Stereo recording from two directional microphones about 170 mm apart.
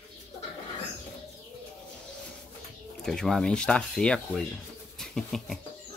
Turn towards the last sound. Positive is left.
turn(degrees=0)  # may be behind; listen again after turning